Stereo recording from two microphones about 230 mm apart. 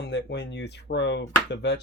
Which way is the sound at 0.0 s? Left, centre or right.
Left.